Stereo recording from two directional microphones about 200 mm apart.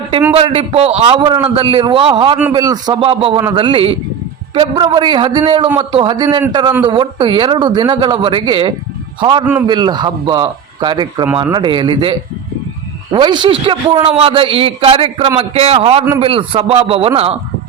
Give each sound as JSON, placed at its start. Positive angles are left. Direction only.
{"t": 0.3, "sound": "a man's voice", "side_deg": -30}